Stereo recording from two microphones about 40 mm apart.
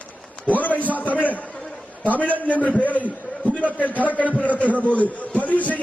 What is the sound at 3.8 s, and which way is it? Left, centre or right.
A man's voice, left.